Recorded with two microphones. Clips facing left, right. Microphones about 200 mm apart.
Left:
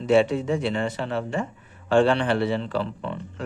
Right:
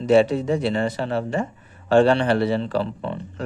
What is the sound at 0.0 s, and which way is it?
Speech, 40° right (ahead or behind).